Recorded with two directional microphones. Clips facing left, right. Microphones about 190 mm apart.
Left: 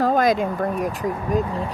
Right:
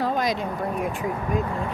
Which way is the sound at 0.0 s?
50° left (ahead or behind).